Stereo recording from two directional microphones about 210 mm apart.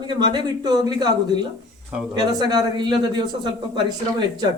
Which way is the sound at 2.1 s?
20° right (ahead or behind).